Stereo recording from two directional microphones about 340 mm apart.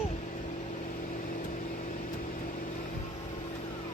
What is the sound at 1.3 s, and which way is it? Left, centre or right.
Vehicle, left.